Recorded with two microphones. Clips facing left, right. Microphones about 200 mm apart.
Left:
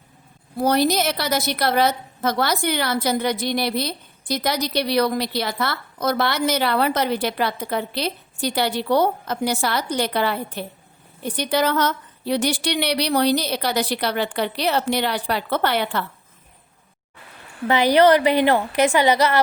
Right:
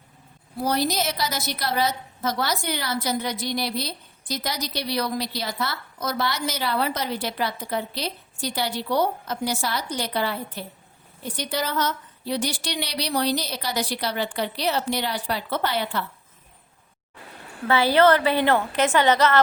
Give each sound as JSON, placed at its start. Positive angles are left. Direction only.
{"t": 0.6, "sound": "a woman's voice", "side_deg": 60}
{"t": 17.7, "sound": "a woman's voice", "side_deg": 15}